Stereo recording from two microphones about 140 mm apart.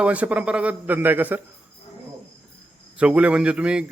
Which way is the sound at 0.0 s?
10° right (ahead or behind).